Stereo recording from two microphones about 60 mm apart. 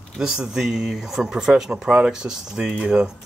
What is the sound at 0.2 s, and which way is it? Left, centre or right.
Speech, centre.